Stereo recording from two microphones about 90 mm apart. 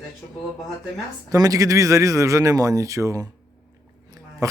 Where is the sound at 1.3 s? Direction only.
40° right (ahead or behind).